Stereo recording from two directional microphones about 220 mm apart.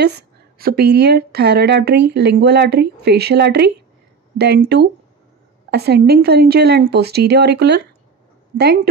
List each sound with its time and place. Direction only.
0.0 s speech: 45° right (ahead or behind)